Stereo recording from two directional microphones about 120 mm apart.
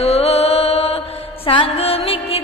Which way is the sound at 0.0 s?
60° left (ahead or behind).